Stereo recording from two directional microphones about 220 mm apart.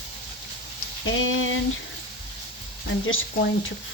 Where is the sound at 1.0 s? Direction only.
65° left (ahead or behind).